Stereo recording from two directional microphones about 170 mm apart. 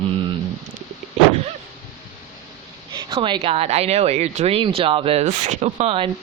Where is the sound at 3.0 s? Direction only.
30° right (ahead or behind).